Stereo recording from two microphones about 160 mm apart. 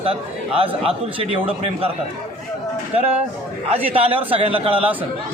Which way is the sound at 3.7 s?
35° right (ahead or behind).